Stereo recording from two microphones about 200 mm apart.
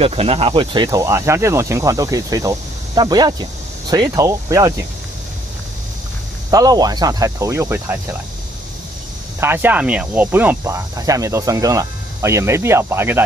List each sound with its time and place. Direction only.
0.0 s speech: 30° right (ahead or behind)
6.5 s speech: 20° right (ahead or behind)
9.4 s speech: 10° right (ahead or behind)